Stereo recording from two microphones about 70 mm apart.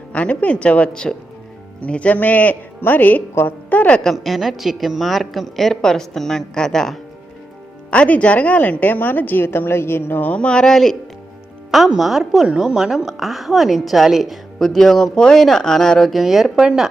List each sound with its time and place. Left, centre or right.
0.1 s a woman's voice: centre
4.0 s a woman's voice: centre
7.9 s a woman's voice: centre